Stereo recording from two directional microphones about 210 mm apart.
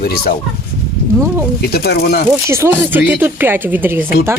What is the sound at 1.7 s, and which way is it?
Speech, 50° left (ahead or behind).